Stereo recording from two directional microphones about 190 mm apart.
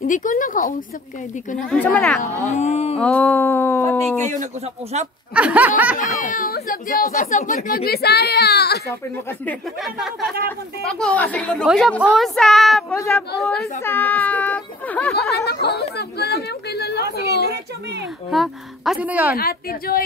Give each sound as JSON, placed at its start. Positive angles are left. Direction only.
{"t": 0.0, "sound": "speech", "side_deg": 45}
{"t": 1.6, "sound": "a woman's voice", "side_deg": 5}
{"t": 2.5, "sound": "a sound", "side_deg": 35}
{"t": 3.0, "sound": "speech", "side_deg": 5}
{"t": 4.9, "sound": "speech", "side_deg": -35}
{"t": 5.3, "sound": "speech", "side_deg": -5}
{"t": 5.9, "sound": "speech", "side_deg": 45}
{"t": 9.5, "sound": "a woman's voice", "side_deg": 0}
{"t": 12.9, "sound": "speech", "side_deg": 15}
{"t": 15.4, "sound": "a woman's voice", "side_deg": 60}
{"t": 18.3, "sound": "speech", "side_deg": 0}
{"t": 19.3, "sound": "speech", "side_deg": 50}